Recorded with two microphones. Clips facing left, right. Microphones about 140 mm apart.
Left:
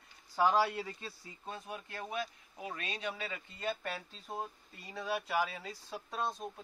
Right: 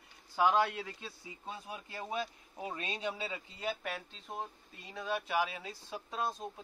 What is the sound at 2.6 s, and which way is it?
Speech, 25° right (ahead or behind).